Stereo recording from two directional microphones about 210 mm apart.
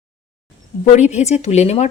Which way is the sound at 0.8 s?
30° left (ahead or behind).